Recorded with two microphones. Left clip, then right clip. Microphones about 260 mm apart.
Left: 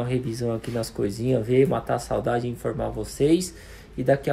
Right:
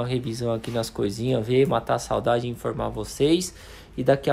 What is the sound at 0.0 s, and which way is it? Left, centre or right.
Speech, centre.